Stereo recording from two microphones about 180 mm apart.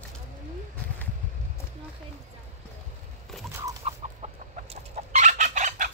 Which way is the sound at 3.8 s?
35° right (ahead or behind).